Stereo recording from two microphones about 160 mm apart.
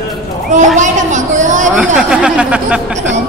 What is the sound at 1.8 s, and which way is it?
Speech, 5° right (ahead or behind).